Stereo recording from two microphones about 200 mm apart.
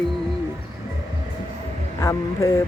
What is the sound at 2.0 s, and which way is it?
Speech, 15° left (ahead or behind).